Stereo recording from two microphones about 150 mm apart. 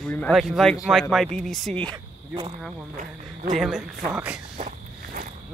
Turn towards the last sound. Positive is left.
turn(degrees=-60)  # may be behind; listen again after turning